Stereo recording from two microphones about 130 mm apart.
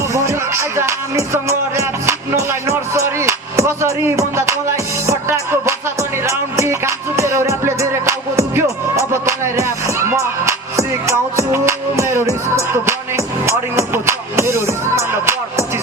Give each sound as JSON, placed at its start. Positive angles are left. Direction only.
{"t": 0.1, "sound": "music", "side_deg": -20}